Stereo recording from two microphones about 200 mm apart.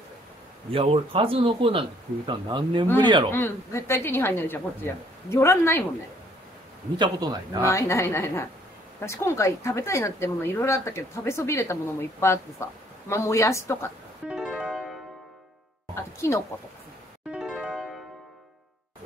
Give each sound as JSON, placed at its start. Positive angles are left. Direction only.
{"t": 0.7, "sound": "speech", "side_deg": -25}
{"t": 3.3, "sound": "speech", "side_deg": 10}
{"t": 7.0, "sound": "speech", "side_deg": -20}
{"t": 7.6, "sound": "speech", "side_deg": 15}
{"t": 14.2, "sound": "music", "side_deg": -5}
{"t": 15.9, "sound": "music", "side_deg": 15}
{"t": 17.3, "sound": "music", "side_deg": -5}